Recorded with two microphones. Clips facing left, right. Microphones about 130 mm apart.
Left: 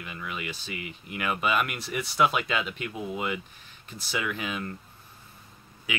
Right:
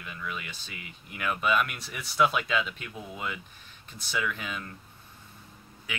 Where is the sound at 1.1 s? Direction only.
10° left (ahead or behind).